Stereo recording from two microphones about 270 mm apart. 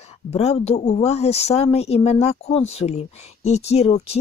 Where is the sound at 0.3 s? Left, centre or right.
Left.